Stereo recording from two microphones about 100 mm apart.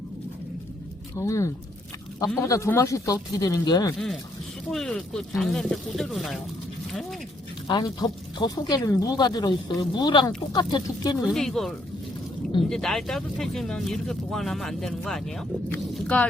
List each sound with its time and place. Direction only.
1.1 s speech: 30° left (ahead or behind)
4.7 s speech: 5° left (ahead or behind)
7.7 s speech: 45° left (ahead or behind)
11.3 s speech: 5° left (ahead or behind)